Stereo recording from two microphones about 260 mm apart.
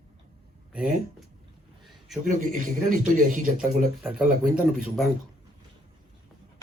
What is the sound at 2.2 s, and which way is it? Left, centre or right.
A man's voice, right.